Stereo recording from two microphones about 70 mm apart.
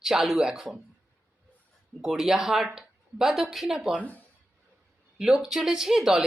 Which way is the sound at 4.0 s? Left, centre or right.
Left.